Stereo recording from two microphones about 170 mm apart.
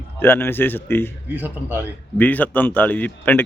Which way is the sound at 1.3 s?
10° right (ahead or behind).